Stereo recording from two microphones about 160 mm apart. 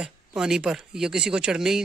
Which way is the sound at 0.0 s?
5° right (ahead or behind).